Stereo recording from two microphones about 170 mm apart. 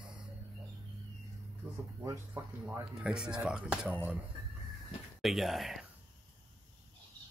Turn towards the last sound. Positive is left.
turn(degrees=0)  # may be behind; listen again after turning